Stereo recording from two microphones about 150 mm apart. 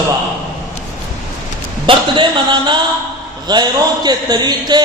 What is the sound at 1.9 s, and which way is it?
A man's voice, 30° right (ahead or behind).